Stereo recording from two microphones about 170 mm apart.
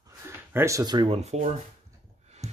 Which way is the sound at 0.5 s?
15° right (ahead or behind).